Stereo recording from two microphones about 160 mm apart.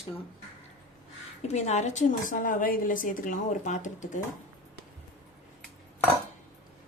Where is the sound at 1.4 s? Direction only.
45° left (ahead or behind).